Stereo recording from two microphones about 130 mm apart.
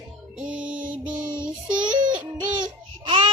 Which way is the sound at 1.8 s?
35° right (ahead or behind).